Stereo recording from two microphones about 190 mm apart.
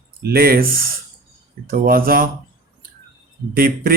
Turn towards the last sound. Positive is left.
turn(degrees=-50)  # may be behind; listen again after turning